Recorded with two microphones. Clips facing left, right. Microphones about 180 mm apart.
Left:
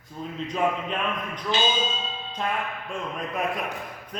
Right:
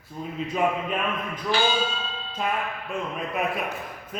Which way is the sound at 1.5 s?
20° left (ahead or behind).